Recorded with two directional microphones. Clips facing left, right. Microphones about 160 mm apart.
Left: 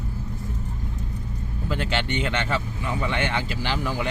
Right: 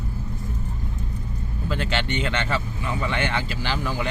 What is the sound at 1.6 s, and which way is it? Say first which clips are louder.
Speech: even; 15° left (ahead or behind).